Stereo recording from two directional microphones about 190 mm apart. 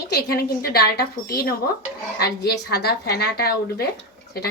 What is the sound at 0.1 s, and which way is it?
A woman's voice, 55° left (ahead or behind).